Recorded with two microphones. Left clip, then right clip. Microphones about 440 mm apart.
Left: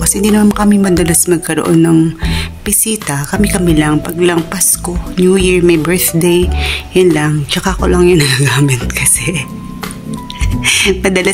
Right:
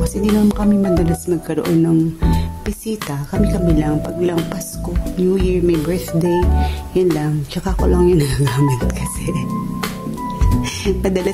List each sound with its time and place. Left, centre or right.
0.0 s speech: right
10.6 s speech: right